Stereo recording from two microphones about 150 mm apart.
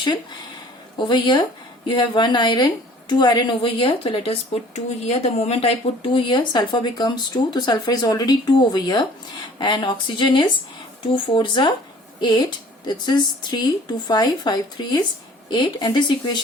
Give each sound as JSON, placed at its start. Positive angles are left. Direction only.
{"t": 0.9, "sound": "a woman's voice", "side_deg": 30}
{"t": 12.8, "sound": "a woman's voice", "side_deg": 30}